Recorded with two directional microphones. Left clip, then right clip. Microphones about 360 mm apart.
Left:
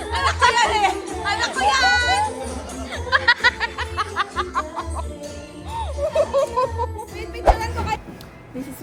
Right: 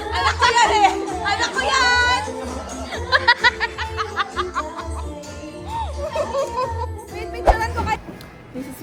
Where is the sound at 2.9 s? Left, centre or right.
Centre.